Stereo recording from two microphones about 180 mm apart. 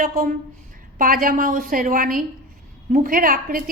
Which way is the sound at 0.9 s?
50° right (ahead or behind).